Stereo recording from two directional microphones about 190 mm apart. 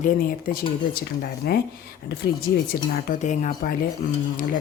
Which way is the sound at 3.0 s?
40° left (ahead or behind).